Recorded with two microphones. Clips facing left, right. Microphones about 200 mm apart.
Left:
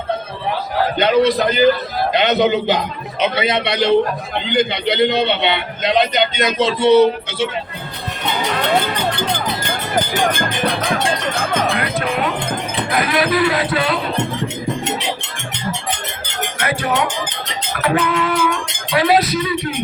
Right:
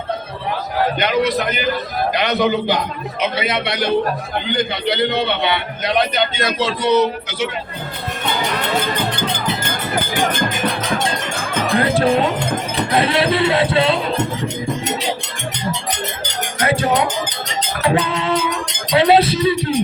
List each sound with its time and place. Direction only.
0.9 s a man's voice: 30° left (ahead or behind)
10.7 s tubular bells: 50° right (ahead or behind)
11.8 s speech: 30° right (ahead or behind)
16.6 s music: 25° right (ahead or behind)
17.7 s a sound: 25° right (ahead or behind)